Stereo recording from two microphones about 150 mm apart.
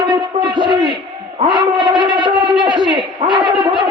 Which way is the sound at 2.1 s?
30° right (ahead or behind).